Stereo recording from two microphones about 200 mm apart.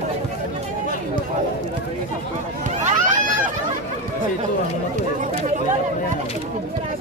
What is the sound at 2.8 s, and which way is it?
Run, 40° right (ahead or behind).